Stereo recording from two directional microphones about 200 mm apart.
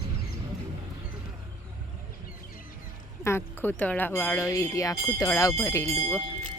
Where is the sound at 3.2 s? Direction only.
10° left (ahead or behind).